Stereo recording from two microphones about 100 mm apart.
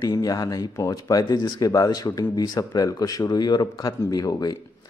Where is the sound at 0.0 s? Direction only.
40° left (ahead or behind).